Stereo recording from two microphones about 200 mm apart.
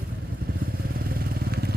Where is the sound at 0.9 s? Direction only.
50° right (ahead or behind).